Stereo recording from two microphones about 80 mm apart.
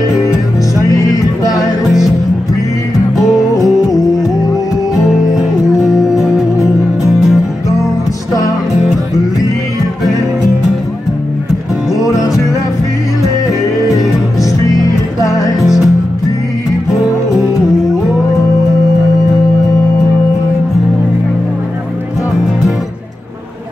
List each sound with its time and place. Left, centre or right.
0.8 s music: left
1.9 s music: centre
4.9 s music: centre
12.0 s music: left
13.9 s music: left
15.6 s music: centre